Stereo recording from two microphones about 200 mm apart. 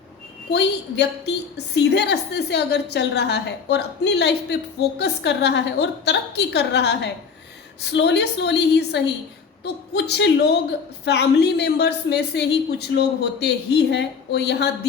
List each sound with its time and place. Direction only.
0.5 s a woman's voice: 55° left (ahead or behind)